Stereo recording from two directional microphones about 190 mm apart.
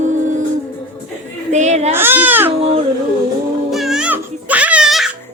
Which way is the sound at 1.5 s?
35° right (ahead or behind).